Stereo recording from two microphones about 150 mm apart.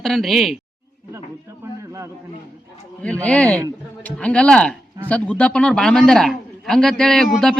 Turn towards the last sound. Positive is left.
turn(degrees=0)  # may be behind; listen again after turning